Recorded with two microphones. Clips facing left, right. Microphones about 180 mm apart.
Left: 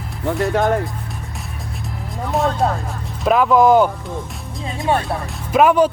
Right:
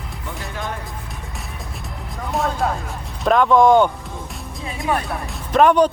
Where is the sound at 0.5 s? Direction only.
65° left (ahead or behind).